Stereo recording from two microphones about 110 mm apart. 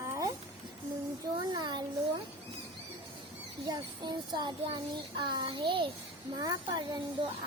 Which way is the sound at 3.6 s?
40° right (ahead or behind).